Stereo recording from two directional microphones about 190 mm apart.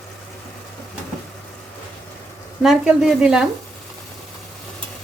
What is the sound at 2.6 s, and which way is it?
Speech, centre (ahead or behind).